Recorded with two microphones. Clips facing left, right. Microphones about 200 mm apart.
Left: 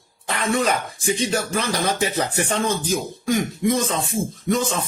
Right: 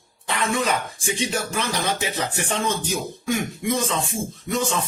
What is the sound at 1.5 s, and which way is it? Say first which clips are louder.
Speech: left 2 dB; 40° left (ahead or behind).